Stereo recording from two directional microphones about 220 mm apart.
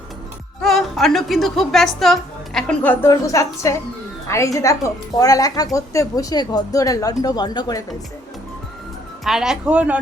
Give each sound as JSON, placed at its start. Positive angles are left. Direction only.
{"t": 0.6, "sound": "a woman's voice", "side_deg": 0}
{"t": 9.2, "sound": "speech", "side_deg": 0}